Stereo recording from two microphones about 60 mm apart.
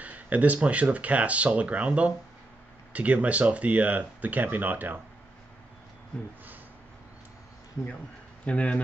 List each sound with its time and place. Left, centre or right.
0.0 s speech: right
6.1 s speech: centre
8.5 s speech: left